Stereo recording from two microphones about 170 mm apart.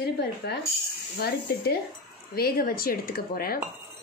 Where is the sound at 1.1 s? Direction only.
65° left (ahead or behind).